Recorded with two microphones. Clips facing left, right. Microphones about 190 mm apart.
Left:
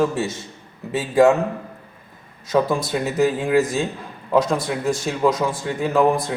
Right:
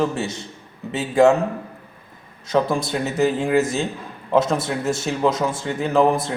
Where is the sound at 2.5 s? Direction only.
Centre (ahead or behind).